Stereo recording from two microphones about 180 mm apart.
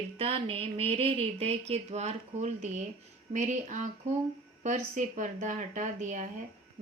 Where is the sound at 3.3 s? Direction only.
45° right (ahead or behind).